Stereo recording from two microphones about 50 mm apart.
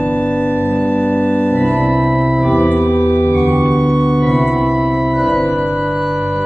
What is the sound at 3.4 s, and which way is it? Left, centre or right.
Music, right.